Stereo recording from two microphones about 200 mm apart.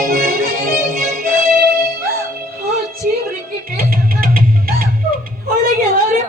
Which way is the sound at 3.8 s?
45° right (ahead or behind).